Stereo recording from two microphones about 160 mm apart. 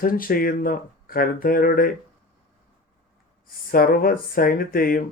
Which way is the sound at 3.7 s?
65° left (ahead or behind).